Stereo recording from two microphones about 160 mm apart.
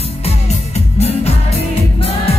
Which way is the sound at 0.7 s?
40° left (ahead or behind).